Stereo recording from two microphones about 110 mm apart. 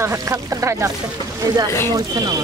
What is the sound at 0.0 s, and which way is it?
Speech, 25° right (ahead or behind).